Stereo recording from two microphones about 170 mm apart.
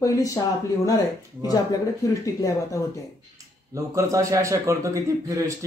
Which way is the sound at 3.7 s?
20° right (ahead or behind).